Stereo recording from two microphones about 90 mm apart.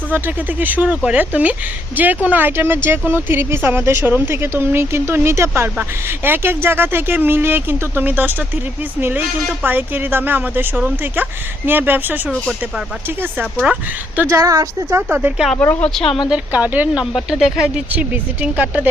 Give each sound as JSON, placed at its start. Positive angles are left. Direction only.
{"t": 0.1, "sound": "speech", "side_deg": -20}
{"t": 13.4, "sound": "speech", "side_deg": -10}
{"t": 14.3, "sound": "a woman's voice", "side_deg": -40}
{"t": 15.5, "sound": "speech", "side_deg": 25}
{"t": 16.3, "sound": "speech", "side_deg": -15}
{"t": 17.1, "sound": "speech", "side_deg": -5}
{"t": 17.9, "sound": "speech", "side_deg": -20}